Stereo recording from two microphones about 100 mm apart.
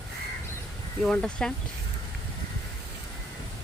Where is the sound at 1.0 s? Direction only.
10° left (ahead or behind).